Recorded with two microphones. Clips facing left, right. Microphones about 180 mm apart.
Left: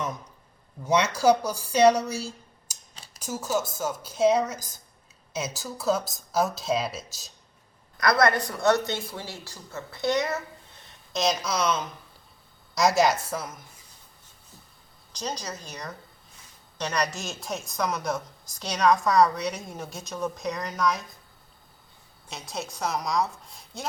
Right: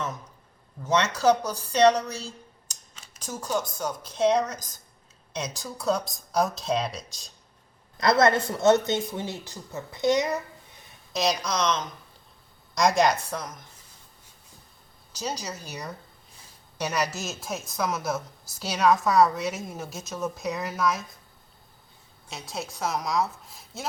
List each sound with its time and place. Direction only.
0.9 s speech: 10° left (ahead or behind)
2.9 s a sound: 35° left (ahead or behind)
3.2 s a woman's voice: 10° left (ahead or behind)
7.9 s a woman's voice: 25° right (ahead or behind); by 13.7 s 5° left (ahead or behind)
15.1 s a woman's voice: 10° right (ahead or behind)
22.3 s a woman's voice: centre (ahead or behind)